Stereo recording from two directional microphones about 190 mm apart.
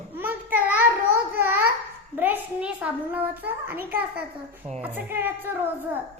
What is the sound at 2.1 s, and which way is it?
A child's voice, 10° right (ahead or behind).